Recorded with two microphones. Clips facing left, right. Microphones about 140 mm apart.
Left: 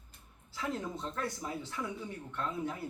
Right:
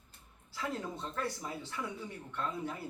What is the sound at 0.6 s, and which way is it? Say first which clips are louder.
Speech: left 1 dB; 5° right (ahead or behind).